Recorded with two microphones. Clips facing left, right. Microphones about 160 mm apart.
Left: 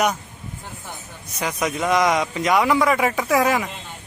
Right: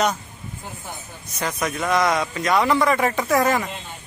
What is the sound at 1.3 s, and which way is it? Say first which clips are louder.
A man's voice: left 1 dB; 15° left (ahead or behind).